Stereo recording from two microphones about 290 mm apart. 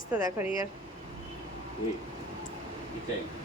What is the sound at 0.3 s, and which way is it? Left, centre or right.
Speech, centre.